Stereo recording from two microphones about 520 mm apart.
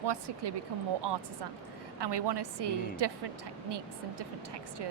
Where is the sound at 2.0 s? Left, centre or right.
Right.